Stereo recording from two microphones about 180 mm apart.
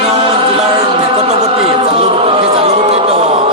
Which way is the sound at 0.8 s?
35° right (ahead or behind).